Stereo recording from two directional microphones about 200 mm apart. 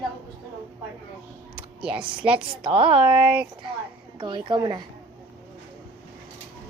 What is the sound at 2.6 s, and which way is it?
Speech, 25° right (ahead or behind).